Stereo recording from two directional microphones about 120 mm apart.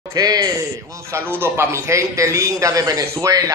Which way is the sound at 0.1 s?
35° right (ahead or behind).